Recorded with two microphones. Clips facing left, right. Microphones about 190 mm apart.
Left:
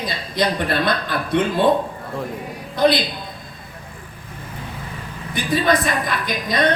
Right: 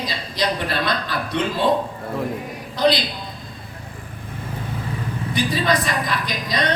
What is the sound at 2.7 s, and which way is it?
Speech, 55° left (ahead or behind).